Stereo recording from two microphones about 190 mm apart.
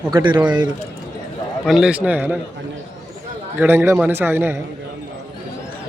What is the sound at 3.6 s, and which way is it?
Speech, 10° right (ahead or behind).